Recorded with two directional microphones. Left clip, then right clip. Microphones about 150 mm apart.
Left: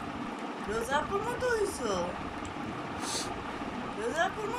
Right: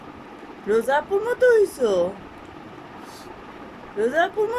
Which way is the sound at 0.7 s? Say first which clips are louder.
Right 11 dB; 75° right (ahead or behind).